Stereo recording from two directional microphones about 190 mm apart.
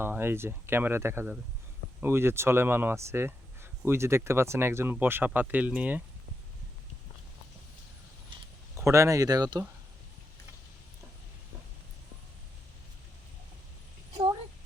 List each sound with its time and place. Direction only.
0.0 s speech: 10° right (ahead or behind)
8.7 s speech: 15° right (ahead or behind)